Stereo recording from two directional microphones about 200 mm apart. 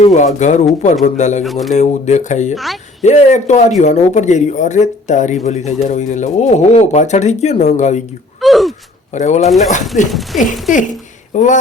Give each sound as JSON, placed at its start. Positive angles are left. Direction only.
{"t": 0.0, "sound": "speech", "side_deg": 35}
{"t": 1.5, "sound": "speech", "side_deg": 0}
{"t": 1.8, "sound": "speech", "side_deg": 35}
{"t": 8.4, "sound": "gasp", "side_deg": 0}
{"t": 9.1, "sound": "speech", "side_deg": 35}
{"t": 10.3, "sound": "speech", "side_deg": 0}
{"t": 11.3, "sound": "speech", "side_deg": 35}